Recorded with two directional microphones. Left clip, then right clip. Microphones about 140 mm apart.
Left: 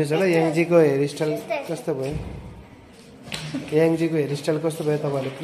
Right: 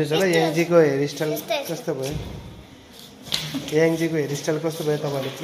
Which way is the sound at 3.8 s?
10° left (ahead or behind).